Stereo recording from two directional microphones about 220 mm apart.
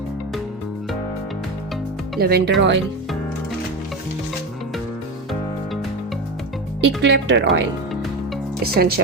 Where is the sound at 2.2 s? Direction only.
45° right (ahead or behind).